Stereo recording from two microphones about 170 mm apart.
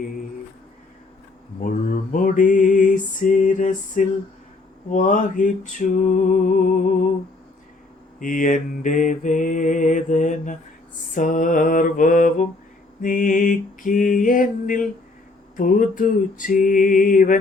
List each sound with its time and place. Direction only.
1.6 s music: 50° left (ahead or behind)
4.9 s mantra: 50° left (ahead or behind)
8.2 s mantra: 50° left (ahead or behind)